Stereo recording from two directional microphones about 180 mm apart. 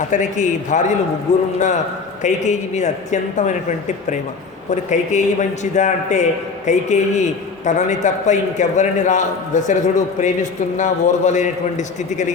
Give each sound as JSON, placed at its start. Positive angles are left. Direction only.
{"t": 0.1, "sound": "a man's voice", "side_deg": 40}
{"t": 2.2, "sound": "a man's voice", "side_deg": 40}